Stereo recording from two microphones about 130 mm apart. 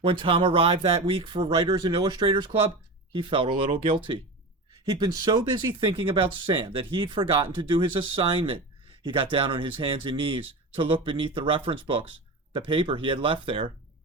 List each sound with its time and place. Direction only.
0.0 s speech: 40° right (ahead or behind)